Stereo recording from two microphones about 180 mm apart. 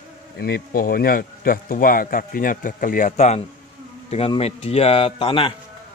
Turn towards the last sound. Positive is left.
turn(degrees=30)  # may be behind; listen again after turning